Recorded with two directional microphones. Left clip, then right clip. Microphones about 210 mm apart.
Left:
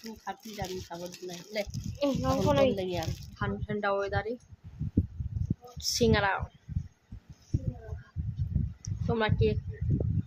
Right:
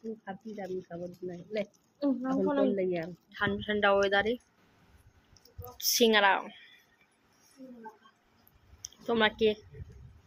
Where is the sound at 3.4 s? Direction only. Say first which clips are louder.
Right 5 dB; centre (ahead or behind).